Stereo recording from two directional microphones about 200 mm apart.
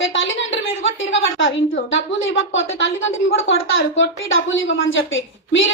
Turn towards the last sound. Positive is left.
turn(degrees=75)  # may be behind; listen again after turning